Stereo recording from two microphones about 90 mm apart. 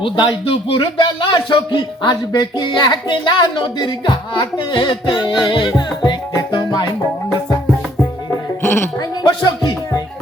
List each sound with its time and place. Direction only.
0.0 s speech: 65° left (ahead or behind)
5.7 s music: 45° left (ahead or behind)
8.6 s sheep: 25° left (ahead or behind)
9.0 s music: 55° left (ahead or behind)